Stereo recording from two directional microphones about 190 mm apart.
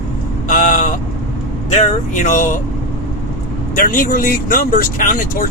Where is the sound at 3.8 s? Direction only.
45° left (ahead or behind).